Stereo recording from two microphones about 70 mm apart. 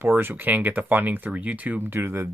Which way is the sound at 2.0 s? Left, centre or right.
Right.